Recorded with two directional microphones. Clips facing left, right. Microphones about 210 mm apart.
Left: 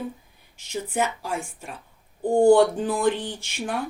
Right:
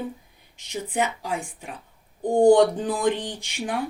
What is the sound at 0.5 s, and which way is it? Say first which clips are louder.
Speech: even; 15° right (ahead or behind).